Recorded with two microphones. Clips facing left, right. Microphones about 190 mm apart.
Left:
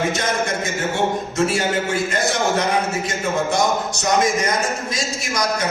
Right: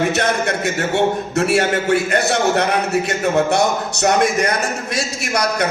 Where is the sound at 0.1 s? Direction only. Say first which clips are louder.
Right 3 dB; 65° right (ahead or behind).